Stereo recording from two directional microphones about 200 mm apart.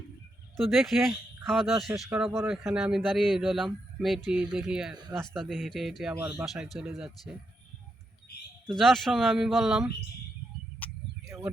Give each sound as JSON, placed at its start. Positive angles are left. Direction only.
{"t": 0.7, "sound": "a man's voice", "side_deg": 0}
{"t": 4.9, "sound": "speech", "side_deg": -20}
{"t": 5.2, "sound": "a man's voice", "side_deg": 0}
{"t": 8.7, "sound": "a man's voice", "side_deg": 0}
{"t": 10.8, "sound": "a sound", "side_deg": 10}
{"t": 11.3, "sound": "speech", "side_deg": -15}